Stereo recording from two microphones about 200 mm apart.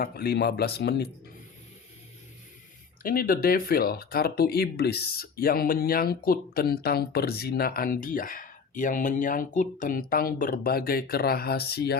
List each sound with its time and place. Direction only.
0.0 s speech: 50° left (ahead or behind)
3.0 s speech: 45° left (ahead or behind)